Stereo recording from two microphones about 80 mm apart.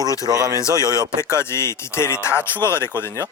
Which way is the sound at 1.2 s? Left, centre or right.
Left.